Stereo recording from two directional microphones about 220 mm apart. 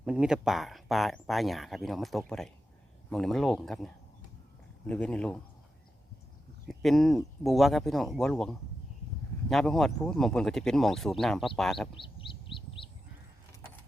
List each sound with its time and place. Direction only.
0.0 s speech: 5° right (ahead or behind)
6.7 s speech: centre (ahead or behind)
11.9 s chirp: 25° left (ahead or behind)